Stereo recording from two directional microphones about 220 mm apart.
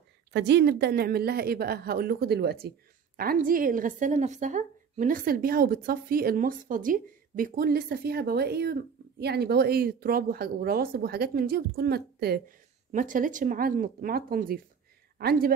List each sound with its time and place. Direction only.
0.3 s a woman's voice: 50° right (ahead or behind)